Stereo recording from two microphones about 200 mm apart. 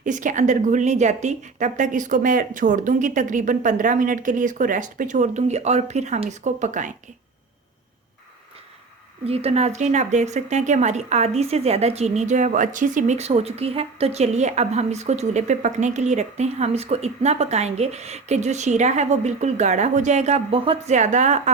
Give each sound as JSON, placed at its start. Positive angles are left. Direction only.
{"t": 0.0, "sound": "speech", "side_deg": -40}
{"t": 9.2, "sound": "speech", "side_deg": -30}